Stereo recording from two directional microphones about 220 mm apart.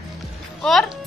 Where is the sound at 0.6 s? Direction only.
Centre (ahead or behind).